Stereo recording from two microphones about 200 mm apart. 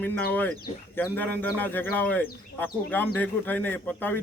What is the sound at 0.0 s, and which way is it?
Speech, 10° left (ahead or behind).